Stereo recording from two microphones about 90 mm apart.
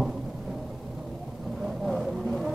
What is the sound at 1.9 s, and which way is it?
Vehicle, centre (ahead or behind).